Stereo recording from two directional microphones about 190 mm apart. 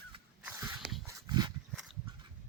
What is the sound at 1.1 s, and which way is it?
Dog, 20° right (ahead or behind).